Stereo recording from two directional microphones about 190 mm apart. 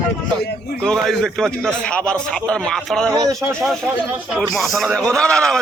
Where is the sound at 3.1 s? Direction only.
15° right (ahead or behind).